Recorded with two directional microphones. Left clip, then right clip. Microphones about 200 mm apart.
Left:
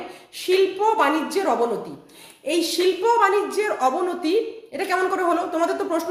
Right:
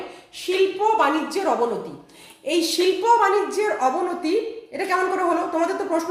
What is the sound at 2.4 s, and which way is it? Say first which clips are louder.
A woman's voice: even; 5° left (ahead or behind).